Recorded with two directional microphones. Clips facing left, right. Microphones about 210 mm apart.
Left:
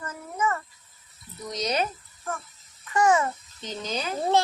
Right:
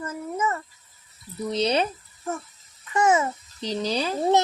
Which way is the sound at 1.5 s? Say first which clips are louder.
Right 4 dB; 30° right (ahead or behind).